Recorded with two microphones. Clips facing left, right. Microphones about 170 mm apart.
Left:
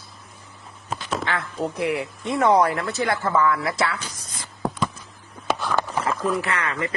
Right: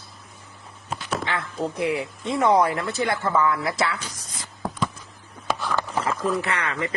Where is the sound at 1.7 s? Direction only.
25° right (ahead or behind).